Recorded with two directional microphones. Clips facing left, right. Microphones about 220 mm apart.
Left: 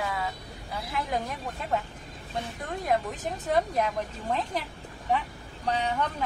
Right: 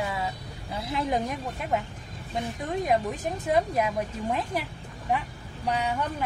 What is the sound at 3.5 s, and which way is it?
Speech, 10° right (ahead or behind).